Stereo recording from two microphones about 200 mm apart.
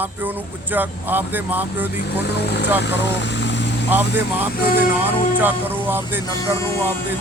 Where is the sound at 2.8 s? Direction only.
60° left (ahead or behind).